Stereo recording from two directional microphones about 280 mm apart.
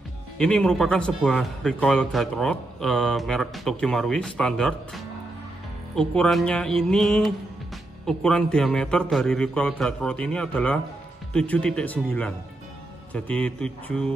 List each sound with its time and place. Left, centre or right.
0.4 s a man's voice: centre